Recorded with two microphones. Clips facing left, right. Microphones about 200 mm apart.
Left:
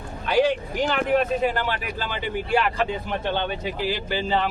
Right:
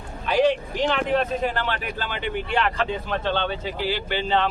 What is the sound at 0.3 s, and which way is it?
Speech, 5° left (ahead or behind).